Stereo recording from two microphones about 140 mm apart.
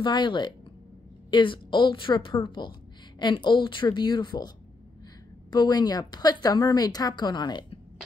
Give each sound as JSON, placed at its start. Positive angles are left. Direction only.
{"t": 0.0, "sound": "a woman's voice", "side_deg": 35}
{"t": 5.5, "sound": "a woman's voice", "side_deg": 30}